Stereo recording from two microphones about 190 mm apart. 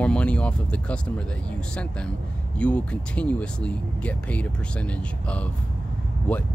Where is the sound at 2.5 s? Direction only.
5° left (ahead or behind).